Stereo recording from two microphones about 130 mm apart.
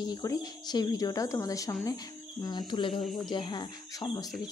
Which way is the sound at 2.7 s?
40° left (ahead or behind).